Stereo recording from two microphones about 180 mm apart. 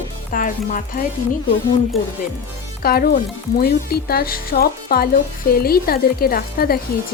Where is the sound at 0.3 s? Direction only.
50° left (ahead or behind).